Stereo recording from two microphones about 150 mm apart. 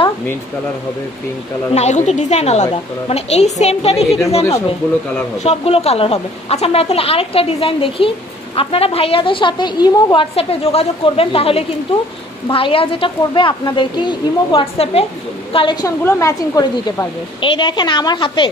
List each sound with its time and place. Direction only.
1.7 s a woman's voice: 50° left (ahead or behind); by 10.2 s 25° left (ahead or behind)
10.3 s a woman's voice: 40° left (ahead or behind)
15.5 s speech: 30° left (ahead or behind)
16.0 s speech: 20° left (ahead or behind)
17.4 s a woman's voice: 35° left (ahead or behind)